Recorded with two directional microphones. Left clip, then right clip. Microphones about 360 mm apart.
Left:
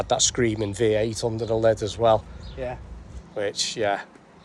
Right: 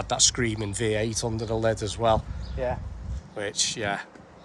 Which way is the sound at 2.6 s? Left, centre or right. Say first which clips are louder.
Right 3 dB; right.